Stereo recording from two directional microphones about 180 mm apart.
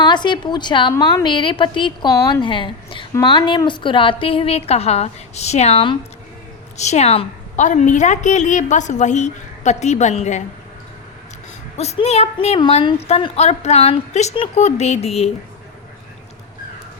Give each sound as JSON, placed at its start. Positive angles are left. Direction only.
{"t": 0.0, "sound": "a woman's voice", "side_deg": 25}
{"t": 2.1, "sound": "a woman's voice", "side_deg": 15}
{"t": 2.4, "sound": "a woman's voice", "side_deg": 30}
{"t": 11.8, "sound": "a woman's voice", "side_deg": 35}